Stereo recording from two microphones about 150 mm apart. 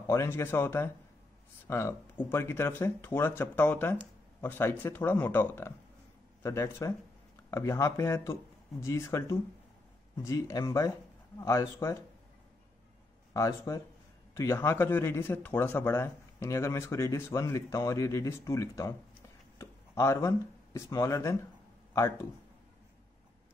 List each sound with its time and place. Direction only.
0.0 s speech: 20° left (ahead or behind)
13.3 s speech: 20° left (ahead or behind)